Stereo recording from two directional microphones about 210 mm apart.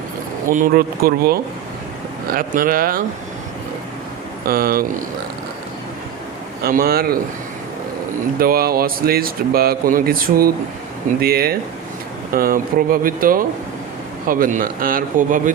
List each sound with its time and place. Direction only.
0.4 s speech: 40° right (ahead or behind)
4.4 s speech: 45° right (ahead or behind)
6.6 s speech: 45° right (ahead or behind)
8.4 s a man's voice: 45° right (ahead or behind)